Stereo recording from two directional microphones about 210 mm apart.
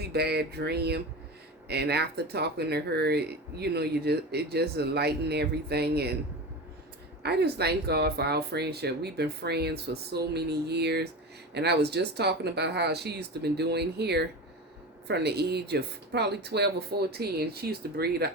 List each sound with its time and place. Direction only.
0.0 s speech: 50° right (ahead or behind)
7.2 s speech: 50° right (ahead or behind)